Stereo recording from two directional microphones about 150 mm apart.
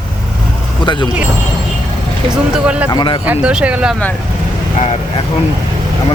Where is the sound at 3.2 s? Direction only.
10° right (ahead or behind).